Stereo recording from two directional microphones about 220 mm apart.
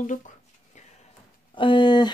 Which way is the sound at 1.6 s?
20° left (ahead or behind).